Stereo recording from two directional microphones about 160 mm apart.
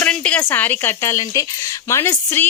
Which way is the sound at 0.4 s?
10° left (ahead or behind).